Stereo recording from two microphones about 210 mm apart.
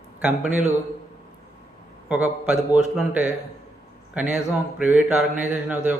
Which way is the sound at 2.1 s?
5° right (ahead or behind).